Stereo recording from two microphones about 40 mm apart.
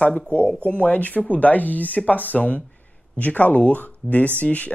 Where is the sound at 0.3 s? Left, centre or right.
Left.